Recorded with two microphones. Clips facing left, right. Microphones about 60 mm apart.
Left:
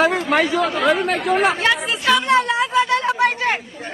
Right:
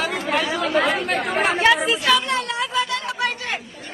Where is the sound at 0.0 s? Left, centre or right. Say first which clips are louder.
Left 6 dB; left.